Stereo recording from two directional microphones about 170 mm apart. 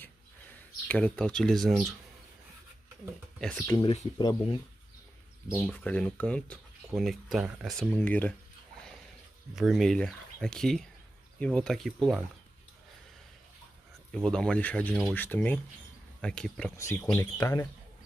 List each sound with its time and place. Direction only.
0.8 s speech: 5° left (ahead or behind)
3.3 s speech: 5° left (ahead or behind)
3.8 s speech: 40° left (ahead or behind)
4.2 s speech: 25° left (ahead or behind)
5.6 s speech: 5° left (ahead or behind)
8.0 s speech: 10° left (ahead or behind)
9.6 s speech: centre (ahead or behind)
14.1 s speech: 5° left (ahead or behind)
16.7 s speech: 15° left (ahead or behind)